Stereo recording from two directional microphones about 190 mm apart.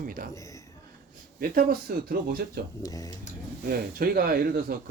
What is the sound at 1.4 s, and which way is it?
A man's voice, 45° right (ahead or behind).